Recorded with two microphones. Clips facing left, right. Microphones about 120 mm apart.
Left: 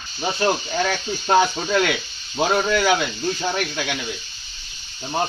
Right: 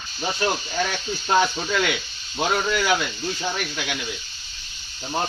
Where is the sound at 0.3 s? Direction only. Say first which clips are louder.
Left 3 dB; 20° left (ahead or behind).